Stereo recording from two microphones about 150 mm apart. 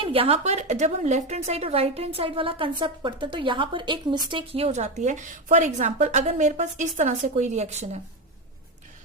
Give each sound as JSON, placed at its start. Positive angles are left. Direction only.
{"t": 0.0, "sound": "a woman's voice", "side_deg": -40}